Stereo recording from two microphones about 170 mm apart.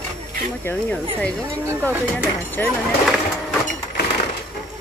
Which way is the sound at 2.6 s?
10° left (ahead or behind).